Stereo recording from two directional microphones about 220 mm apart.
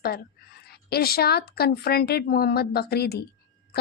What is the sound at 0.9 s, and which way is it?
Speech, 45° left (ahead or behind).